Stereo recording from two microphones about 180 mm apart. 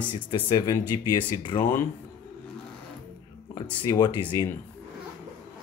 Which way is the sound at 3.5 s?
20° left (ahead or behind).